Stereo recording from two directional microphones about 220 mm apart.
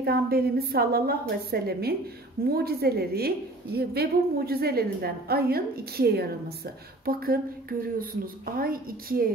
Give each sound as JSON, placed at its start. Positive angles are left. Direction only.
{"t": 0.0, "sound": "a woman's voice", "side_deg": -45}